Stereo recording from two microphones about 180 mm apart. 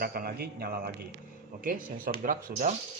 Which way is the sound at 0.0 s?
55° right (ahead or behind).